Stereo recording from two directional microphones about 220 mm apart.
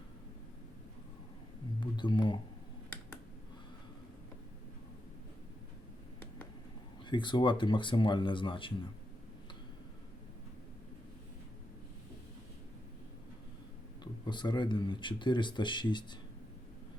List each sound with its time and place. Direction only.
1.8 s speech: 20° left (ahead or behind)
7.1 s speech: 20° left (ahead or behind)
14.0 s speech: 20° left (ahead or behind)